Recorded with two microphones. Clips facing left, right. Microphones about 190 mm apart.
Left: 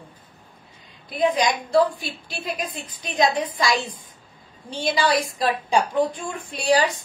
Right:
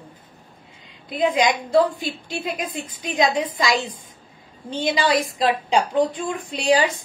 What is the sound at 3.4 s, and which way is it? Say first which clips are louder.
A woman's voice: right 1 dB; 20° right (ahead or behind).